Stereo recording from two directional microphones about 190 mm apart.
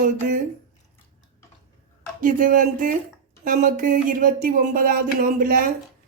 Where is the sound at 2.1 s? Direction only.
45° right (ahead or behind).